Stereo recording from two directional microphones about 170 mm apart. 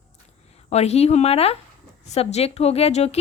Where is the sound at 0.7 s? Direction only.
40° left (ahead or behind).